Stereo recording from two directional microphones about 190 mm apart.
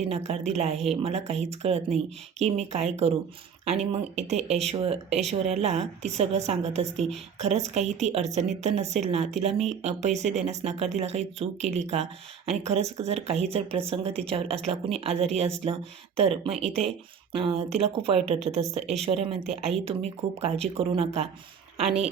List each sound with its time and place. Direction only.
0.1 s speech: 35° right (ahead or behind)